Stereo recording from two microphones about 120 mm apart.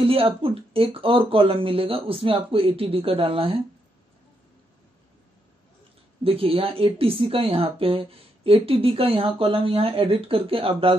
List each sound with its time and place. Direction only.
0.0 s speech: 50° right (ahead or behind)
6.2 s speech: 50° right (ahead or behind)